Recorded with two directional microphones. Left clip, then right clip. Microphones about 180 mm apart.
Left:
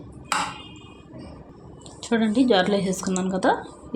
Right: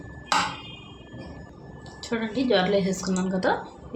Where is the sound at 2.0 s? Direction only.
45° left (ahead or behind).